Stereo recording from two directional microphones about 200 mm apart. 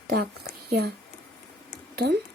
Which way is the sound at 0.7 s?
55° right (ahead or behind).